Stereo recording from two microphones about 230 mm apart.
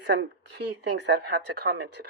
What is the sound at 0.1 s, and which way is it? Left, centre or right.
Speech, right.